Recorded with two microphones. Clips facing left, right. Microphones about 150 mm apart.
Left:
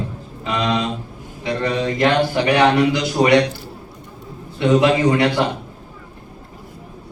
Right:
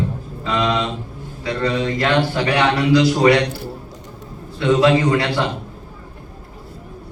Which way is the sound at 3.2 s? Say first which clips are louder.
Left 2 dB; 25° left (ahead or behind).